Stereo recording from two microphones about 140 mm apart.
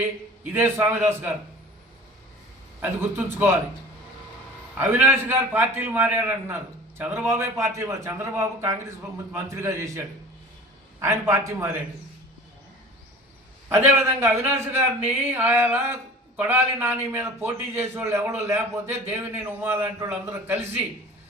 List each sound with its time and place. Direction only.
0.0 s a man's voice: 15° right (ahead or behind)
2.8 s a man's voice: 15° right (ahead or behind)
4.8 s a man's voice: 15° right (ahead or behind)
11.0 s a man's voice: 20° right (ahead or behind)
13.9 s a man's voice: 15° right (ahead or behind)